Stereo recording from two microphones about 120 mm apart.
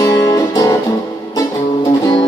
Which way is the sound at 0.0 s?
30° left (ahead or behind).